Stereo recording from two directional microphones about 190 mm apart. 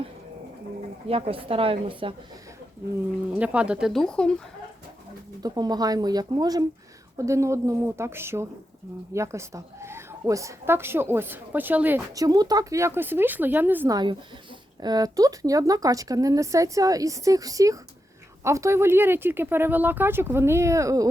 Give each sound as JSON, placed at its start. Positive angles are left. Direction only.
{"t": 1.0, "sound": "speech", "side_deg": -30}
{"t": 3.3, "sound": "speech", "side_deg": -5}
{"t": 5.4, "sound": "speech", "side_deg": -20}